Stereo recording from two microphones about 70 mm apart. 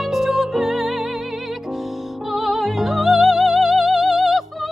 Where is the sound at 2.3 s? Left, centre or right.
Centre.